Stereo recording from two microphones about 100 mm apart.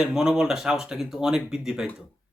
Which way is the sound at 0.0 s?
5° right (ahead or behind).